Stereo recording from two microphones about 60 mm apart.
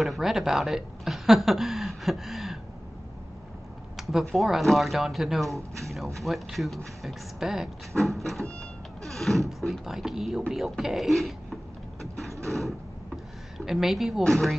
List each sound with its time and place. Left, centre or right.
0.0 s speech: centre
3.9 s a sound: centre
4.4 s speech: centre
5.5 s speech: right
6.2 s speech: centre
7.9 s cat: centre
9.5 s speech: centre
12.2 s a sound: right
12.4 s a sound: centre
13.7 s speech: centre
14.2 s speech: centre